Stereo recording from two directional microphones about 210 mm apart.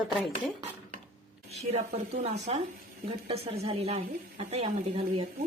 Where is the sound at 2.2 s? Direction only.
30° right (ahead or behind).